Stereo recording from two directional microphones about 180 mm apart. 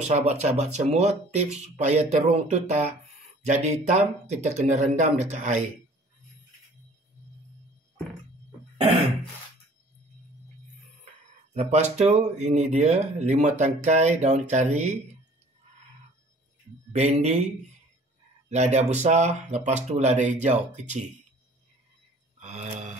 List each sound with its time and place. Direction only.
0.0 s speech: 35° right (ahead or behind)
11.5 s speech: 40° right (ahead or behind)
16.9 s speech: 40° right (ahead or behind)
18.5 s speech: 40° right (ahead or behind)
22.4 s a sound: 40° right (ahead or behind)